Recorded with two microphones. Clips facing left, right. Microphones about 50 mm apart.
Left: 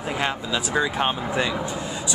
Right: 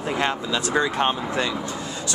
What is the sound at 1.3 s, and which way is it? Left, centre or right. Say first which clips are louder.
Speech: left 1 dB; centre.